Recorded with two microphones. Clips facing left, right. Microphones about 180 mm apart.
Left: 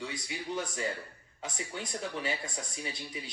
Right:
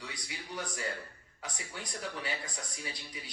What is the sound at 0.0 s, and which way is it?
Speech, 25° left (ahead or behind).